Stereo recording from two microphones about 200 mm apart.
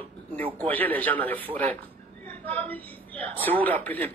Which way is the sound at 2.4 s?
10° left (ahead or behind).